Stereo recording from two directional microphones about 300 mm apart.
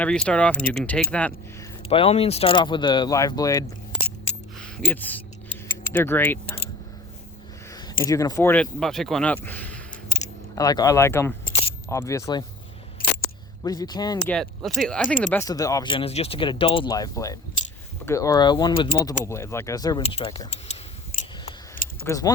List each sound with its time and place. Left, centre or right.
0.0 s speech: centre
1.9 s speech: centre
7.7 s speech: centre
13.7 s speech: centre
14.3 s speech: centre
21.2 s scissors: left
22.0 s speech: centre